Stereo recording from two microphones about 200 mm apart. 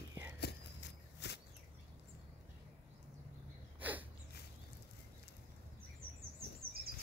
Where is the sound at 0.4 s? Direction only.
55° left (ahead or behind).